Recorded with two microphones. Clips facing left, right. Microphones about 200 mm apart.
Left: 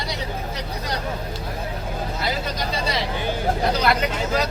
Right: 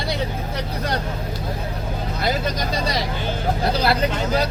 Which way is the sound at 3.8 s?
30° right (ahead or behind).